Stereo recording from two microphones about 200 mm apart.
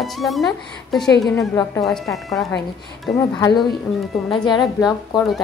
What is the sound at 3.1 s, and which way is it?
A woman's voice, 15° left (ahead or behind).